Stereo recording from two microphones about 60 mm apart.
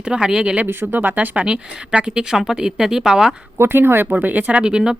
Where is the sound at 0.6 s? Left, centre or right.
Right; by 3.4 s centre.